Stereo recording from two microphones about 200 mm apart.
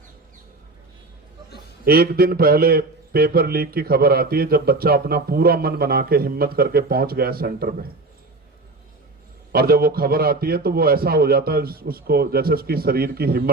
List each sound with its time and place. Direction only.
1.8 s a man's voice: 50° right (ahead or behind)
9.5 s a man's voice: 50° right (ahead or behind)